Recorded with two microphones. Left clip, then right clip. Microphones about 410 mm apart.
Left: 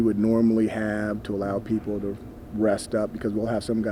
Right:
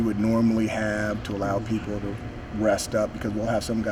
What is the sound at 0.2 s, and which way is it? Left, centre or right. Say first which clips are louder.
Speech: left 2 dB; left.